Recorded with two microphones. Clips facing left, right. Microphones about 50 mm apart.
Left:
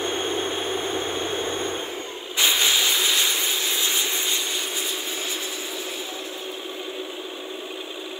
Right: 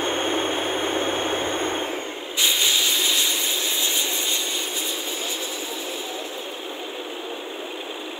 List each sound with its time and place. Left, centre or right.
0.0 s a sound: right
2.3 s hiss: centre
3.8 s vehicle: centre